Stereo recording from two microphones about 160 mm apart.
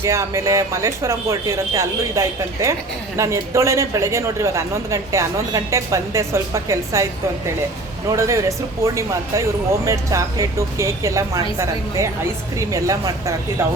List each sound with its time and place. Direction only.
0.0 s speech: 20° right (ahead or behind)
8.1 s speech: 20° right (ahead or behind)